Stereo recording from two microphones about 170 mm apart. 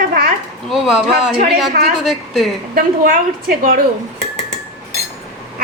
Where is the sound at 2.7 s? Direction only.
60° right (ahead or behind).